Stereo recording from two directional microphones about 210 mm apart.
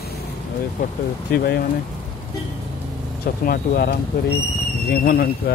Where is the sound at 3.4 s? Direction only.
45° left (ahead or behind).